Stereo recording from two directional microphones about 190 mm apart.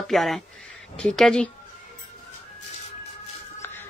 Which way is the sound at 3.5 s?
10° left (ahead or behind).